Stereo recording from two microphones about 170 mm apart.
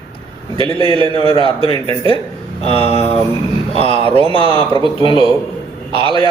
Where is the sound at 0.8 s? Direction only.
30° right (ahead or behind).